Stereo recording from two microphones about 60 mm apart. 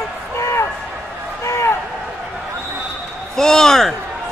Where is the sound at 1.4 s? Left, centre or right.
Left.